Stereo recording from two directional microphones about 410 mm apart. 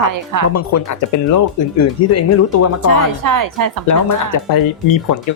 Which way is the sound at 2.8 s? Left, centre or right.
Right.